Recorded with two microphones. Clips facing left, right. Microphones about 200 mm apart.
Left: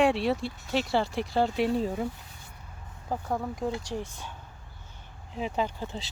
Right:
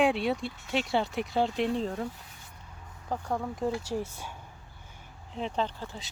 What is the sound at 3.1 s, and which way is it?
Speech, 5° left (ahead or behind).